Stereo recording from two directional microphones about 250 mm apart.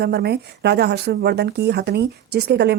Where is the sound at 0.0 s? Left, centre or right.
Right.